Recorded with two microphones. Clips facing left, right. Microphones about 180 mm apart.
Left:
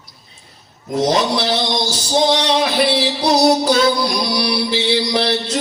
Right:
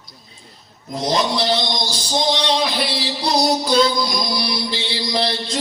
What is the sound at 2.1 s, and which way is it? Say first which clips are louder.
Music: left 4 dB; 70° left (ahead or behind).